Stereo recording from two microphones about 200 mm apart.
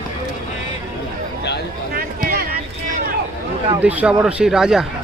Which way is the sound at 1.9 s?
50° right (ahead or behind).